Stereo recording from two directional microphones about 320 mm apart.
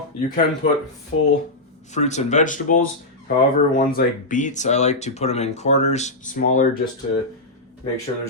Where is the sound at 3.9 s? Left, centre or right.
Left.